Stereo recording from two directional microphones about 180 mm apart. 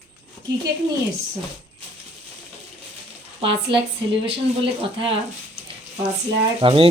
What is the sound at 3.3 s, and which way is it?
Speech, 30° right (ahead or behind).